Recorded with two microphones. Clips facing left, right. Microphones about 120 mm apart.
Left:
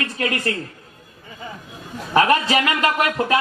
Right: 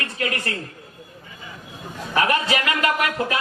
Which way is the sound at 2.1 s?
30° left (ahead or behind).